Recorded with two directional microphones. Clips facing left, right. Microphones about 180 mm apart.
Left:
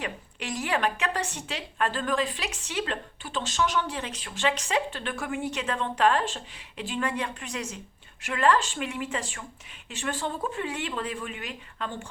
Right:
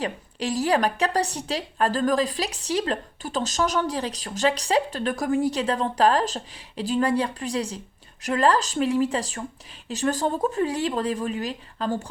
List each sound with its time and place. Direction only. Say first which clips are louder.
0.0 s a woman's voice: right 7 dB; 35° right (ahead or behind)